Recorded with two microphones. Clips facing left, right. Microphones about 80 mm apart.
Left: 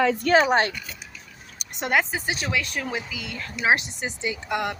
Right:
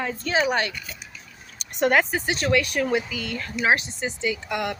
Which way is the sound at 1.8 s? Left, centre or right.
Centre.